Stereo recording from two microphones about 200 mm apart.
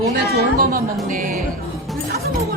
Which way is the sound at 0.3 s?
50° right (ahead or behind).